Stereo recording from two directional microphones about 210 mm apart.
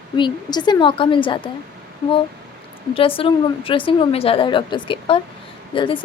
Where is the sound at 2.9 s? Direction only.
25° left (ahead or behind).